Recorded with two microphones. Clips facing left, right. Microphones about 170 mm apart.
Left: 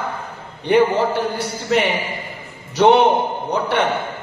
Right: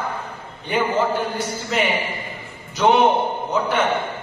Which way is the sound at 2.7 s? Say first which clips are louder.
Left 3 dB; 70° left (ahead or behind).